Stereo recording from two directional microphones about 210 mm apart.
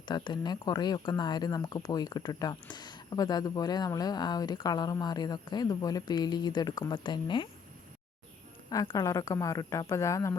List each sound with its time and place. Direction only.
0.0 s speech: 20° left (ahead or behind)
8.7 s a woman's voice: 15° left (ahead or behind)